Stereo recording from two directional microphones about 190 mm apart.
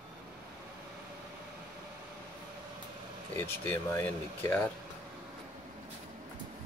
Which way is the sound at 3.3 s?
10° left (ahead or behind).